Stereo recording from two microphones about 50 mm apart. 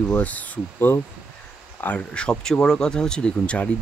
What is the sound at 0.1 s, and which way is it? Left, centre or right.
Speech, left.